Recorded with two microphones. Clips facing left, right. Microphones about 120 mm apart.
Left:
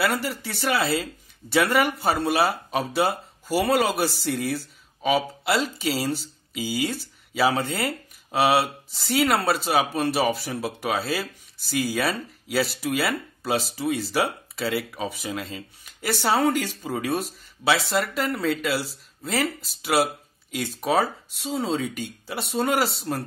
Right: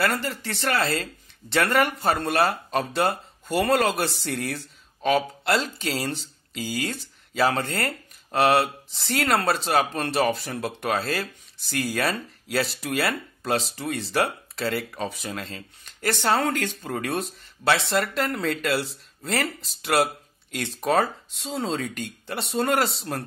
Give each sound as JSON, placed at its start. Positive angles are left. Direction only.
{"t": 0.0, "sound": "speech", "side_deg": 5}